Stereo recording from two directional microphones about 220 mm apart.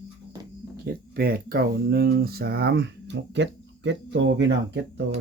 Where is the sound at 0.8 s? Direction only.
45° right (ahead or behind).